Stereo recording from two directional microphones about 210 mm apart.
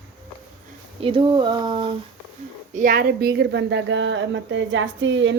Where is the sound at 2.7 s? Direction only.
40° right (ahead or behind).